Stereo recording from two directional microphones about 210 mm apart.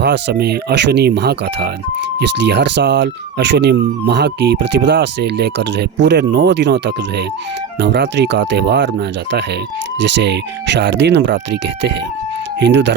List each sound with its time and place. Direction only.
0.0 s speech: 55° right (ahead or behind)
12.5 s speech: 55° right (ahead or behind)